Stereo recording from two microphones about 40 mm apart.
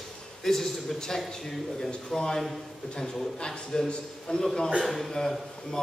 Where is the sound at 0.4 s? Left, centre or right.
Centre.